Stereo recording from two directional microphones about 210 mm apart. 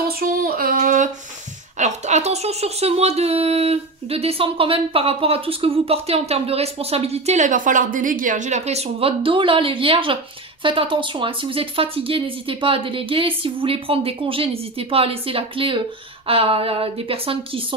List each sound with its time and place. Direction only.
0.2 s female singing: 45° right (ahead or behind)
1.8 s speech: 35° right (ahead or behind)